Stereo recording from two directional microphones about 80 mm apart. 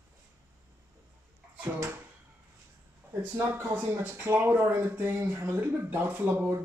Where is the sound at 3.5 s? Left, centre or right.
Right.